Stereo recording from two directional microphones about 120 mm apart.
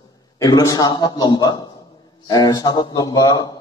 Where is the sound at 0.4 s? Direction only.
30° left (ahead or behind).